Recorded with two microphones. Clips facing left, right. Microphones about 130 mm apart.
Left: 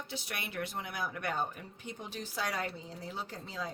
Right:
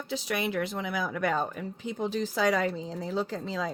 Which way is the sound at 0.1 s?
90° right.